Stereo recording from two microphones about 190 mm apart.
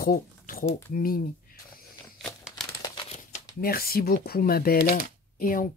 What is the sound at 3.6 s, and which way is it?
Speech, 50° left (ahead or behind).